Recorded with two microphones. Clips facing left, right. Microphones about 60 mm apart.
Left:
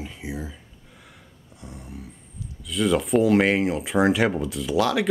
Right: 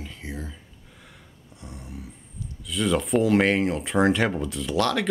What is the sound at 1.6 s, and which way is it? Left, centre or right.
Speech, centre.